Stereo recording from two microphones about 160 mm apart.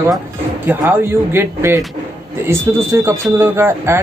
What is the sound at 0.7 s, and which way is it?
A man's voice, 15° right (ahead or behind).